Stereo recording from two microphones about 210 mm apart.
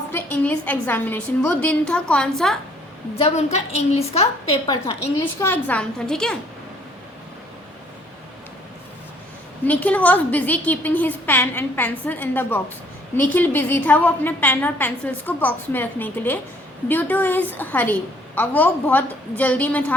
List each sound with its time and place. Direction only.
0.1 s a woman's voice: 10° left (ahead or behind)
3.2 s a woman's voice: 30° left (ahead or behind)
5.2 s a woman's voice: 10° left (ahead or behind)
9.6 s a woman's voice: 5° left (ahead or behind)